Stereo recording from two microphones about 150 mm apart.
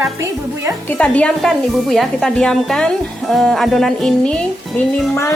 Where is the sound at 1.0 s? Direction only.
5° left (ahead or behind).